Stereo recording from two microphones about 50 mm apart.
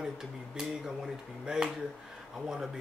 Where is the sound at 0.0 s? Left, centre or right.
Centre.